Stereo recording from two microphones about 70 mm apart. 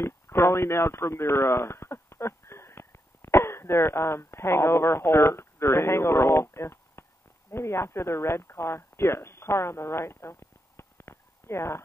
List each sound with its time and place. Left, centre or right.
0.0 s speech: left